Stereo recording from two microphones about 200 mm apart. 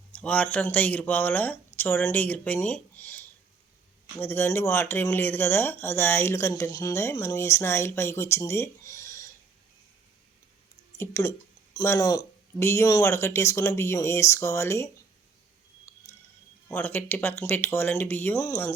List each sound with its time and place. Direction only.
0.1 s speech: 5° left (ahead or behind)
10.9 s speech: 15° left (ahead or behind)
15.9 s a sound: 15° left (ahead or behind)
16.6 s speech: 10° left (ahead or behind)